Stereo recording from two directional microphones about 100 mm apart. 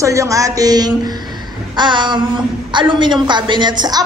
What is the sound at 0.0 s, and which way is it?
A woman's voice, 30° right (ahead or behind).